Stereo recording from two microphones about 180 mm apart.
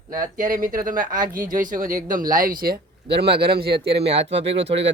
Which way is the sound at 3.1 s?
65° right (ahead or behind).